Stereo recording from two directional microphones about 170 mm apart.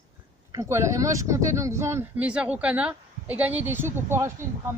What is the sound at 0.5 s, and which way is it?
Speech, 15° right (ahead or behind).